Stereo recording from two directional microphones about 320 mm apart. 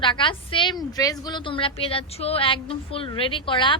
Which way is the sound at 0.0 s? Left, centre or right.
Centre.